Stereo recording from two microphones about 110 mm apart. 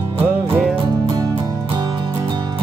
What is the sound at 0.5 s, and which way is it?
Music, 15° right (ahead or behind).